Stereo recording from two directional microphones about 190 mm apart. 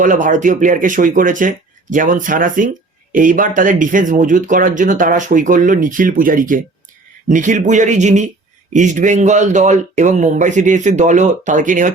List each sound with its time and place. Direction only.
0.0 s speech: 45° right (ahead or behind)